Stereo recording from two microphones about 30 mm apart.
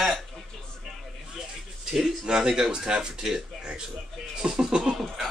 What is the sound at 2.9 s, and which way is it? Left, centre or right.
Speech, right.